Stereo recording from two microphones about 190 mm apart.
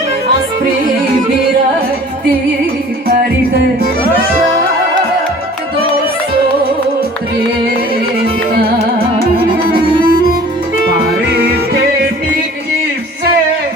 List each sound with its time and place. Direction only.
3.1 s music: 55° right (ahead or behind)
9.6 s music: 50° right (ahead or behind)
11.3 s music: 55° right (ahead or behind)